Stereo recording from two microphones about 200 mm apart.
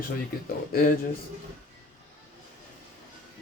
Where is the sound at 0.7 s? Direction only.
45° left (ahead or behind).